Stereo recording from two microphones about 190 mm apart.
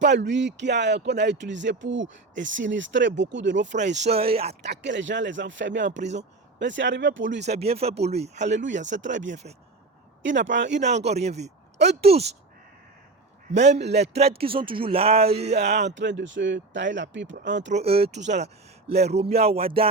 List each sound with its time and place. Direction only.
0.0 s speech: 65° right (ahead or behind)
4.0 s speech: 30° right (ahead or behind)
4.6 s speech: 65° right (ahead or behind)
6.0 s speech: 35° right (ahead or behind)
6.6 s speech: 70° right (ahead or behind)
7.4 s speech: 35° right (ahead or behind)
8.8 s speech: 70° right (ahead or behind)
10.8 s speech: 35° right (ahead or behind)
13.7 s a man's voice: 65° right (ahead or behind)
14.2 s speech: 30° right (ahead or behind)
15.4 s a man's voice: 60° right (ahead or behind)
17.7 s speech: 35° right (ahead or behind)